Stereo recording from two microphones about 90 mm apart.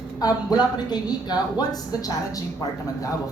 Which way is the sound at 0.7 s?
50° left (ahead or behind).